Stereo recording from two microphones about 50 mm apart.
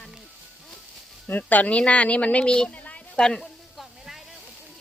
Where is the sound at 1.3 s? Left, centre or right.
Left.